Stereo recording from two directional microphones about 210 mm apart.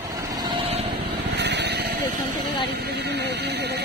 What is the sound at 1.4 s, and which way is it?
Vehicle, 55° right (ahead or behind).